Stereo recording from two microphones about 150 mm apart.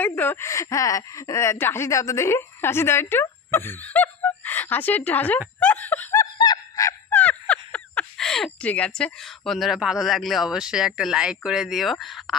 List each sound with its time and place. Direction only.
0.0 s speech: 10° left (ahead or behind)
5.6 s snicker: 10° left (ahead or behind)
6.3 s fowl: 30° left (ahead or behind); by 12.4 s centre (ahead or behind)